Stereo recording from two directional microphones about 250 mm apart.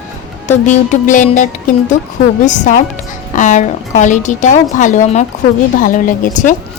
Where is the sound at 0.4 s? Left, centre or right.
Left.